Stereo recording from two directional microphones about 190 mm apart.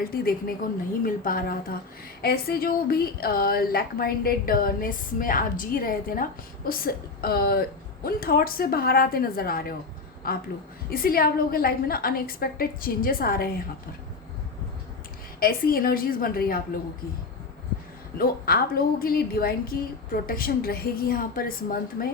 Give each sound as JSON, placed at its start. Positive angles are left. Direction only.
{"t": 0.0, "sound": "a woman's voice", "side_deg": 50}
{"t": 15.4, "sound": "a woman's voice", "side_deg": 50}
{"t": 18.2, "sound": "a woman's voice", "side_deg": 50}